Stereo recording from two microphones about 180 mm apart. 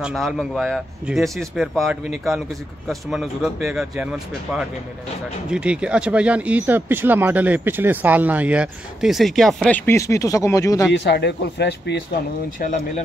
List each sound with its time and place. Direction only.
0.0 s speech: centre (ahead or behind); by 10.9 s 15° left (ahead or behind)
10.9 s speech: 70° left (ahead or behind)
12.5 s speech: 45° left (ahead or behind)